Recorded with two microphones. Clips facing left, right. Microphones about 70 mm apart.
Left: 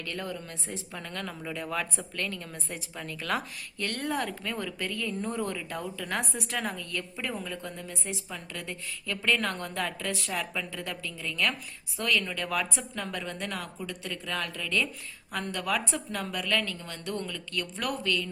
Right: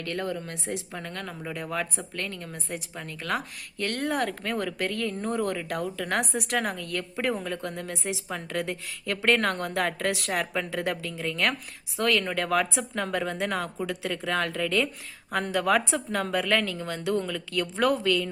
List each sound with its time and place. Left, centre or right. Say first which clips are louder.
0.0 s a woman's voice: right 5 dB; right
0.9 s speech: right 2 dB; right
1.2 s speech: right 1 dB; right
3.8 s a woman's voice: right 4 dB; right